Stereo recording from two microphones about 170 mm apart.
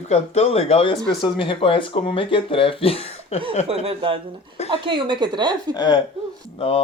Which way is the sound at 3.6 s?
35° right (ahead or behind).